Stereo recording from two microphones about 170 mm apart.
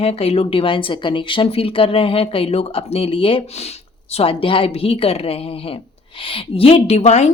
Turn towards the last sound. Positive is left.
turn(degrees=40)  # may be behind; listen again after turning